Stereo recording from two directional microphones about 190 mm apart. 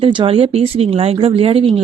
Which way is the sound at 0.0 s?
25° right (ahead or behind).